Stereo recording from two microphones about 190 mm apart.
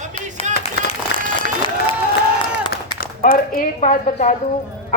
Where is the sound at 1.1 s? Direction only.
60° left (ahead or behind).